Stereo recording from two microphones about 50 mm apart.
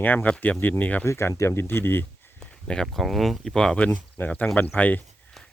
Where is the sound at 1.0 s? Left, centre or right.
Left.